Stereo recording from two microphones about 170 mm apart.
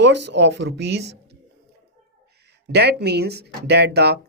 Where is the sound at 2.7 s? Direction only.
75° right (ahead or behind).